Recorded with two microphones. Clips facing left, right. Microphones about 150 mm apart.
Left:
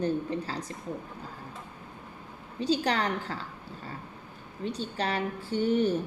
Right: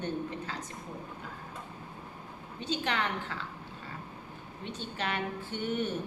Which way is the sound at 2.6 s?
35° left (ahead or behind).